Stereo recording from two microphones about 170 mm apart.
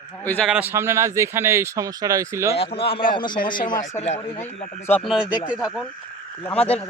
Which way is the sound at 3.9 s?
40° left (ahead or behind).